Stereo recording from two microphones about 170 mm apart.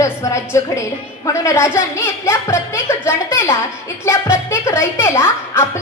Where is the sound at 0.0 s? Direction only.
15° left (ahead or behind).